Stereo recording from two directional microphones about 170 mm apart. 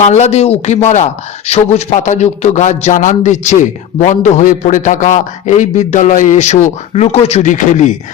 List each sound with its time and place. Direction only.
0.0 s a man's voice: 40° left (ahead or behind)